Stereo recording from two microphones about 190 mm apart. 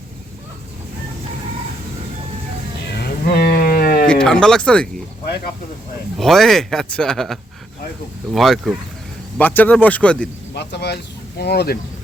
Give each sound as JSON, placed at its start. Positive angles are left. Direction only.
{"t": 3.3, "sound": "a sound", "side_deg": 55}
{"t": 4.0, "sound": "speech", "side_deg": 5}
{"t": 6.1, "sound": "speech", "side_deg": 0}
{"t": 9.4, "sound": "speech", "side_deg": 10}
{"t": 10.5, "sound": "speech", "side_deg": 60}